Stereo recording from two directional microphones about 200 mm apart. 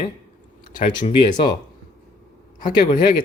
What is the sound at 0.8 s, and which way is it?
Speech, 25° left (ahead or behind).